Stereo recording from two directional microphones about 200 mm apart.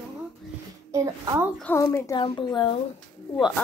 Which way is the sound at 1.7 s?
15° left (ahead or behind).